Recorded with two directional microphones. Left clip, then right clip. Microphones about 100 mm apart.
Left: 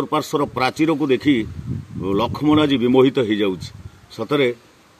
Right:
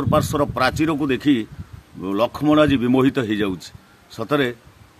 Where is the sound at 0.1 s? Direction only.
45° right (ahead or behind).